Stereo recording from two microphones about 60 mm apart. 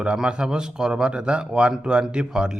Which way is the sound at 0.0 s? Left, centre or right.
Centre.